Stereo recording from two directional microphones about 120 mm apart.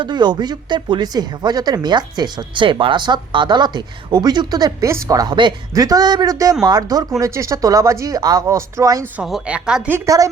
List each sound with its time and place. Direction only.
0.0 s speech: 40° right (ahead or behind)
9.2 s a woman's voice: 5° right (ahead or behind)